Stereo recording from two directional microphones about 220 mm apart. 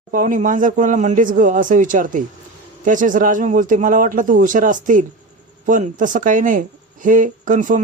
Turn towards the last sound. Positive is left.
turn(degrees=-35)  # may be behind; listen again after turning